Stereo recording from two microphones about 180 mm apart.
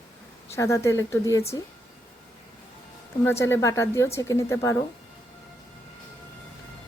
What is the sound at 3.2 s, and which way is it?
A woman's voice, 15° left (ahead or behind).